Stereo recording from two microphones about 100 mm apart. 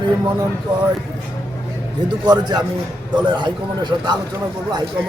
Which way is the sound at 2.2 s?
45° right (ahead or behind).